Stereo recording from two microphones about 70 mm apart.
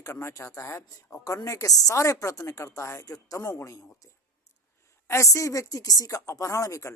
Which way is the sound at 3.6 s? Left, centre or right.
Left.